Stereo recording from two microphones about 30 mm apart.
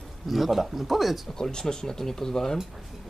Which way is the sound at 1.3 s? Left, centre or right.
Centre.